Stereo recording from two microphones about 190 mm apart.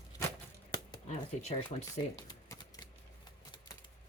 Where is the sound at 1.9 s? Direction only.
20° left (ahead or behind).